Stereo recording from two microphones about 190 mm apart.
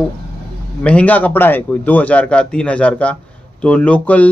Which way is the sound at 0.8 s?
5° left (ahead or behind).